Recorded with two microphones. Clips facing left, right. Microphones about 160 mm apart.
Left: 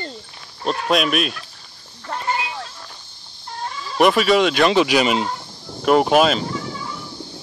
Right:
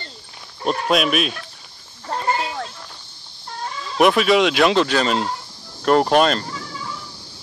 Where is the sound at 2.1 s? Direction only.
35° right (ahead or behind).